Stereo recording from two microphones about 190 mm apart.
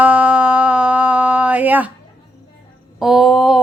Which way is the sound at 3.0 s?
Centre (ahead or behind).